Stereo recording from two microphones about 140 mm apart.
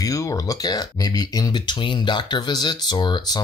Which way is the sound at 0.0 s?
25° left (ahead or behind).